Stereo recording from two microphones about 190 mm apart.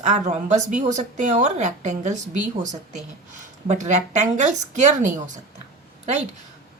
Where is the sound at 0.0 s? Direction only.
35° right (ahead or behind).